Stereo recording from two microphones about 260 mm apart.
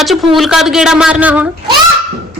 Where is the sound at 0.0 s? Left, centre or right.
Centre.